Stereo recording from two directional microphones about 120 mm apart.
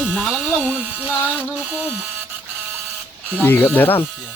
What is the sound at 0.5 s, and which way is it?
Music, 15° left (ahead or behind).